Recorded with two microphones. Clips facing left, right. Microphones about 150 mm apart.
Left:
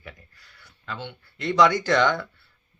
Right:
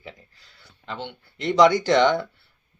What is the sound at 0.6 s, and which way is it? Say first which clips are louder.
Speech: right 2 dB; 25° right (ahead or behind).